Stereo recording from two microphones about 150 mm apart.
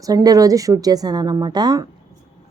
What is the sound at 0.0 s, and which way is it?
A woman's voice, 25° right (ahead or behind).